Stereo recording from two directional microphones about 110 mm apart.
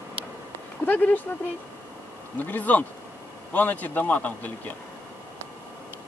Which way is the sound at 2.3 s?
15° left (ahead or behind).